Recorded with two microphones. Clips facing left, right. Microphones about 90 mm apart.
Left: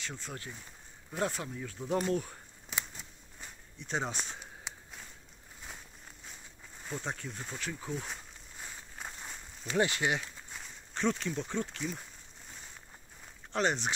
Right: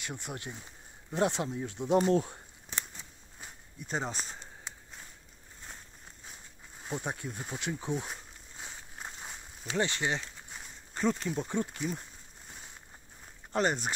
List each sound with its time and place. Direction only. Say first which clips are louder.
0.0 s speech: right 2 dB; 15° right (ahead or behind)
3.3 s walk: right 2 dB; 5° right (ahead or behind)
6.9 s speech: right 2 dB; 15° right (ahead or behind)
9.8 s speech: left 1 dB; 15° left (ahead or behind)
10.5 s speech: left 1 dB; 5° right (ahead or behind)
13.5 s speech: right 1 dB; 5° right (ahead or behind)